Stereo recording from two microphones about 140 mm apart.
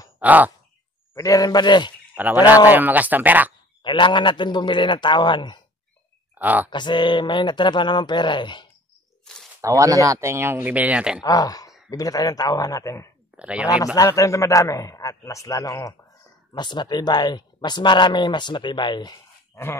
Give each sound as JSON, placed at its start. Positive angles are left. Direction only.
{"t": 0.2, "sound": "a sound", "side_deg": -10}
{"t": 1.1, "sound": "a man's voice", "side_deg": 25}
{"t": 2.1, "sound": "speech", "side_deg": -10}
{"t": 3.8, "sound": "speech", "side_deg": 35}
{"t": 6.3, "sound": "speech", "side_deg": -10}
{"t": 6.7, "sound": "speech", "side_deg": 35}
{"t": 9.2, "sound": "bird", "side_deg": 5}
{"t": 9.6, "sound": "speech", "side_deg": -25}
{"t": 11.2, "sound": "a man's voice", "side_deg": 25}
{"t": 13.4, "sound": "speech", "side_deg": -10}
{"t": 13.9, "sound": "a man's voice", "side_deg": 25}